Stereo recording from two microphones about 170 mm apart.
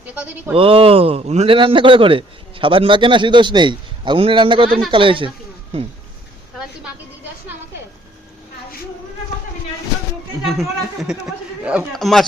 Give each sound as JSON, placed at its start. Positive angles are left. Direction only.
{"t": 0.1, "sound": "speech", "side_deg": -5}
{"t": 0.5, "sound": "a man's voice", "side_deg": -30}
{"t": 10.6, "sound": "speech", "side_deg": -5}